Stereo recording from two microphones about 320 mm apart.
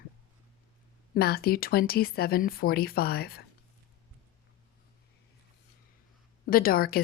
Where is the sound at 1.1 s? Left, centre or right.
Left.